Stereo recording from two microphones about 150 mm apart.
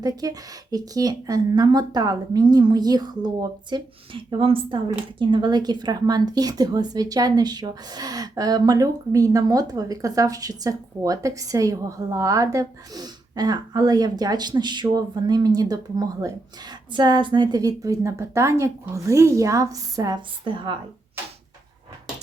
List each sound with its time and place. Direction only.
0.0 s speech: 25° right (ahead or behind)